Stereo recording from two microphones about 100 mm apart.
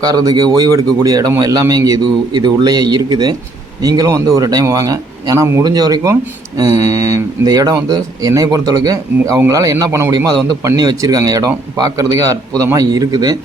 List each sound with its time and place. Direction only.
0.0 s a man's voice: 40° right (ahead or behind)